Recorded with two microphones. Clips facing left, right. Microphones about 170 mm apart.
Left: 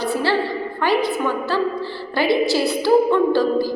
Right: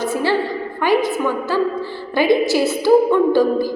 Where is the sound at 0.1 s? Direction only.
15° right (ahead or behind).